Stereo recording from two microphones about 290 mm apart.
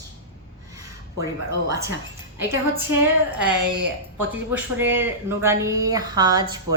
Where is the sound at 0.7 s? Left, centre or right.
Centre.